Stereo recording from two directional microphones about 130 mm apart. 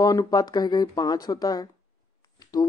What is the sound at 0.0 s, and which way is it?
Speech, 30° left (ahead or behind).